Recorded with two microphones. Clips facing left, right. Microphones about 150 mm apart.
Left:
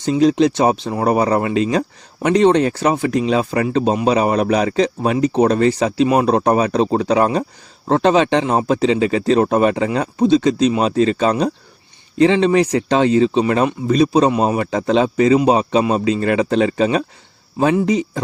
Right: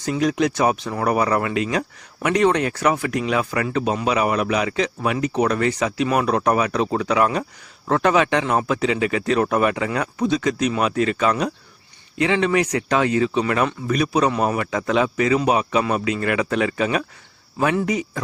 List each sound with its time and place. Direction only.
0.0 s a man's voice: 25° left (ahead or behind)